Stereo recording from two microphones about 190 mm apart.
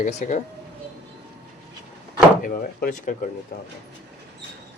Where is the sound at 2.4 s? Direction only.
45° left (ahead or behind).